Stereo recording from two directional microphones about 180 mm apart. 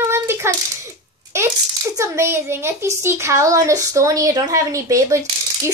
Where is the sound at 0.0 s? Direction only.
15° right (ahead or behind).